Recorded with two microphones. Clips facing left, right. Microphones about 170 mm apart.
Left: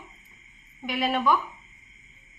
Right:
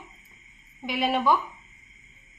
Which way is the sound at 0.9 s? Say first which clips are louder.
Right 1 dB; 20° right (ahead or behind).